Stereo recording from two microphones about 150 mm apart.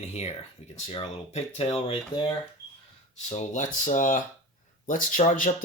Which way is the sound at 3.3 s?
55° left (ahead or behind).